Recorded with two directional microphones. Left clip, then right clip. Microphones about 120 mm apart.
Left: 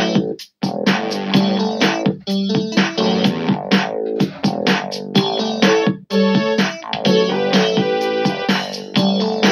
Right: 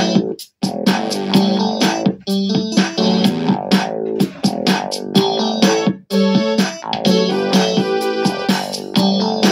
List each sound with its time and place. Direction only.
0.0 s music: 45° right (ahead or behind)